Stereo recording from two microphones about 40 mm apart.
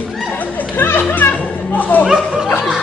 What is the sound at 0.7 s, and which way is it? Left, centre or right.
Speech, left.